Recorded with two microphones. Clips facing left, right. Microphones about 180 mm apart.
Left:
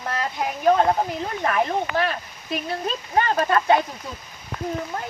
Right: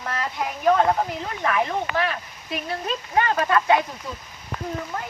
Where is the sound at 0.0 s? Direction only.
35° left (ahead or behind).